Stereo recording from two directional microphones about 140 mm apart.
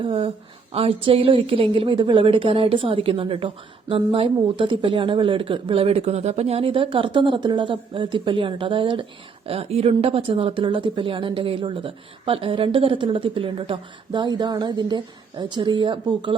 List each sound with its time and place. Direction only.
0.0 s a woman's voice: 40° right (ahead or behind)